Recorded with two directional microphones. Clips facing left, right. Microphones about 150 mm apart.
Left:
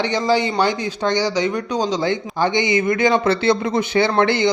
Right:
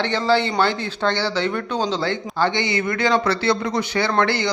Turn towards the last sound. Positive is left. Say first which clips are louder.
# left 4 dB
turn(degrees=20)  # may be behind; listen again after turning